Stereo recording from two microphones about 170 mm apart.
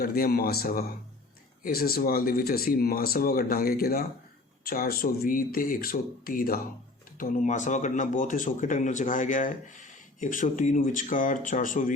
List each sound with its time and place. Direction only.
0.0 s speech: 60° left (ahead or behind)